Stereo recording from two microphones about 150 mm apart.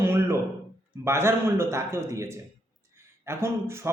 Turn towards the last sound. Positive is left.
turn(degrees=-15)  # may be behind; listen again after turning